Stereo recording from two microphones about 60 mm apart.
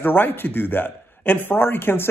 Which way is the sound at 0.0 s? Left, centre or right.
Left.